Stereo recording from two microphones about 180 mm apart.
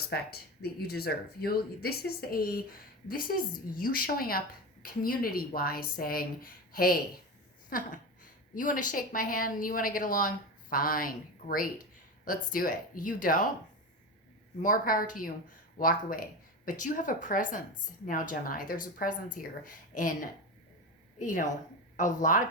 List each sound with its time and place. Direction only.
0.1 s a woman's voice: 65° left (ahead or behind)
14.6 s speech: 50° left (ahead or behind)
21.2 s speech: 45° left (ahead or behind)